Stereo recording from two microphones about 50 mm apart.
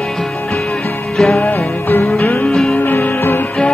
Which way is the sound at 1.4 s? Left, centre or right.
Left.